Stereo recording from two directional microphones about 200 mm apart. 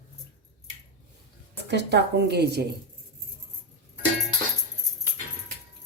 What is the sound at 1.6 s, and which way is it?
A woman's voice, 55° right (ahead or behind).